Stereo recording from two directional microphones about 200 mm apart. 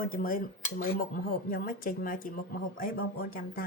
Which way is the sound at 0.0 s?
45° left (ahead or behind).